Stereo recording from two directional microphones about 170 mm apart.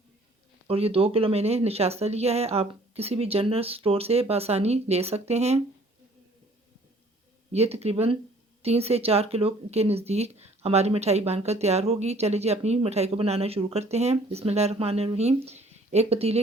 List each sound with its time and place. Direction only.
0.7 s speech: 35° right (ahead or behind)
7.5 s speech: 40° right (ahead or behind)